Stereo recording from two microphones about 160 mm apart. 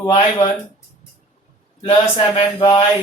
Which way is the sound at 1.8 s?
30° left (ahead or behind).